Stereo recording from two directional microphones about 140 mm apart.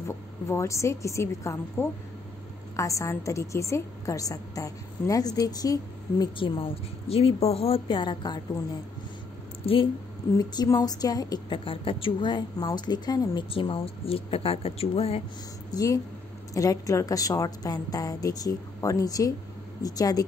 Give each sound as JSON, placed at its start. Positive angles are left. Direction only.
{"t": 0.1, "sound": "a woman's voice", "side_deg": 20}
{"t": 10.3, "sound": "a woman's voice", "side_deg": 25}
{"t": 15.7, "sound": "a woman's voice", "side_deg": 25}